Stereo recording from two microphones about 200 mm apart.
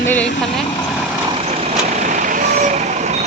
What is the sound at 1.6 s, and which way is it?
Vehicle, 35° right (ahead or behind).